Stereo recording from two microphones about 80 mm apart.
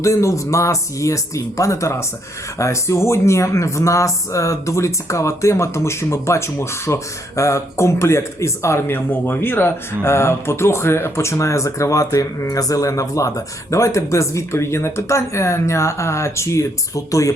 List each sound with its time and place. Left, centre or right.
0.0 s speech: left